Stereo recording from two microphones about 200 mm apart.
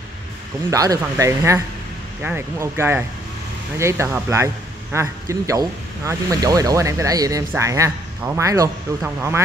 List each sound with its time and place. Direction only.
0.7 s speech: 15° right (ahead or behind)